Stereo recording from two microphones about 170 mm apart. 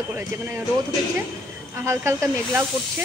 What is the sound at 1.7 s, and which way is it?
Speech, 15° right (ahead or behind).